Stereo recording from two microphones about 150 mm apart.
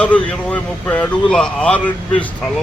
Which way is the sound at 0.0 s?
10° left (ahead or behind).